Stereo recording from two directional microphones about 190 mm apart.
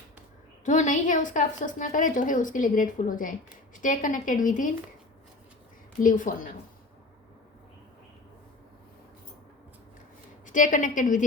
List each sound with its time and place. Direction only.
0.6 s a woman's voice: 40° left (ahead or behind)
6.0 s a woman's voice: 45° left (ahead or behind)
10.4 s a woman's voice: 45° left (ahead or behind)